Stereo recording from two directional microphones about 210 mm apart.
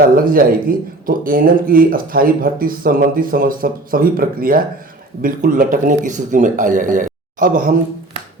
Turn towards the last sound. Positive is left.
turn(degrees=-40)  # may be behind; listen again after turning